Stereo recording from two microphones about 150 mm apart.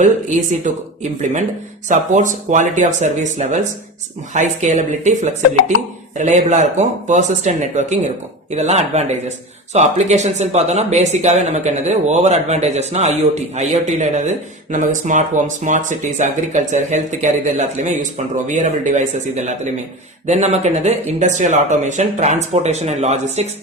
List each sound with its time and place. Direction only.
0.0 s speech: 55° right (ahead or behind)